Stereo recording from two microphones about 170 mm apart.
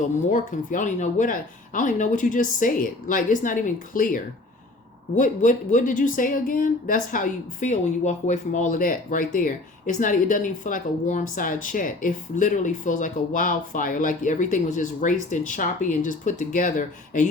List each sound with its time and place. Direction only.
0.2 s speech: 50° left (ahead or behind)